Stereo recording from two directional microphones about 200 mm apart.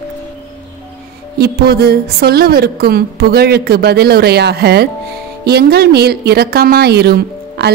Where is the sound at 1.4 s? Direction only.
50° right (ahead or behind).